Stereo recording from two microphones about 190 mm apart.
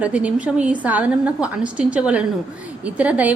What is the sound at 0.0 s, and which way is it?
A woman's voice, 5° right (ahead or behind).